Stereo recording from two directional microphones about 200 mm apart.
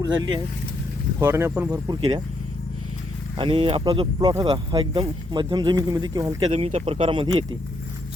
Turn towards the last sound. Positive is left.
turn(degrees=-25)  # may be behind; listen again after turning